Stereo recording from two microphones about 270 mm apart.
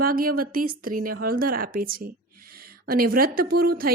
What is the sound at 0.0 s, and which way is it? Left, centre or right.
A woman's voice, right.